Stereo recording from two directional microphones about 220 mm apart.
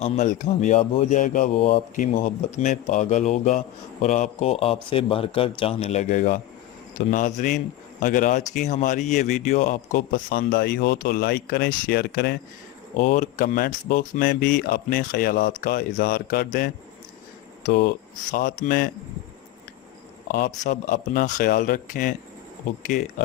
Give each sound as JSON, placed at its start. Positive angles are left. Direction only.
{"t": 0.0, "sound": "speech", "side_deg": 35}
{"t": 13.0, "sound": "speech", "side_deg": 35}
{"t": 20.3, "sound": "speech", "side_deg": 35}